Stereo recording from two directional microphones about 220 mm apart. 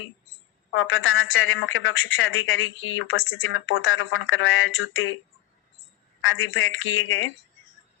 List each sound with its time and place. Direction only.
0.7 s a woman's voice: 60° left (ahead or behind)
6.2 s a woman's voice: 60° left (ahead or behind)